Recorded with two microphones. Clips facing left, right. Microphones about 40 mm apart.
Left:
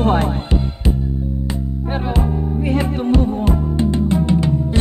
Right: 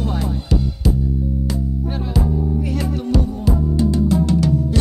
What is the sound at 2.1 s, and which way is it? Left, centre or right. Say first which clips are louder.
Music: even; left.